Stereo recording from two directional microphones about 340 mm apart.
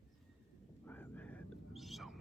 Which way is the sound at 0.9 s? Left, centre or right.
Centre.